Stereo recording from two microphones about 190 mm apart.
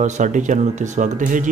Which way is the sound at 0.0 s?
40° right (ahead or behind).